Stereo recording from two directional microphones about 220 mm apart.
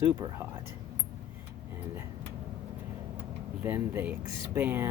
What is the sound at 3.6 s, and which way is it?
Speech, 10° right (ahead or behind).